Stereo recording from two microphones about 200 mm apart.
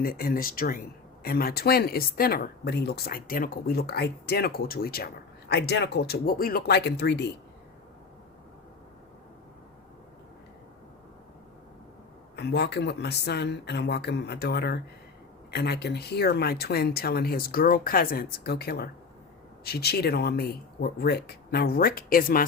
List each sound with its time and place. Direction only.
0.0 s speech: 45° left (ahead or behind)
12.4 s speech: 55° left (ahead or behind)